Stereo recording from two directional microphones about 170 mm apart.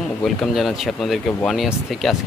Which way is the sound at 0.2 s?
Centre (ahead or behind).